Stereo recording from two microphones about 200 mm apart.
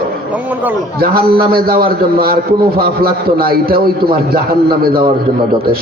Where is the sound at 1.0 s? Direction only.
50° right (ahead or behind).